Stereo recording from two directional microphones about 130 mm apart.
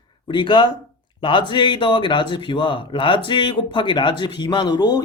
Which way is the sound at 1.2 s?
40° left (ahead or behind).